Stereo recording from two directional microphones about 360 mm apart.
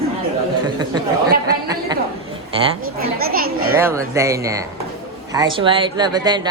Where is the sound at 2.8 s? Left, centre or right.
Right.